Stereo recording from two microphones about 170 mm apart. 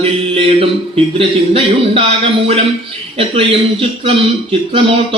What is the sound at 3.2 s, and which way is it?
Speech, 30° right (ahead or behind).